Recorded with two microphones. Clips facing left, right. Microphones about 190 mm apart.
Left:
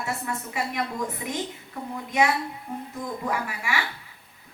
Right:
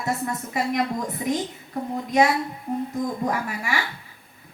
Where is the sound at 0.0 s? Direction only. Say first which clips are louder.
Right 4 dB; 40° right (ahead or behind).